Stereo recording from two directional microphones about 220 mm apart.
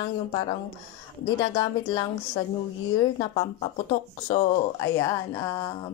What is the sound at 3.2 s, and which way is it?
Speech, 20° left (ahead or behind).